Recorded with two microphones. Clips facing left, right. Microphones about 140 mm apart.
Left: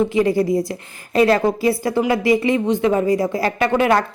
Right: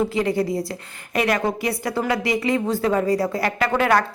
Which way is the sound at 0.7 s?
25° left (ahead or behind).